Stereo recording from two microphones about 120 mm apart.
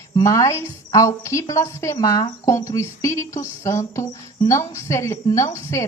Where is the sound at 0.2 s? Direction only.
25° left (ahead or behind).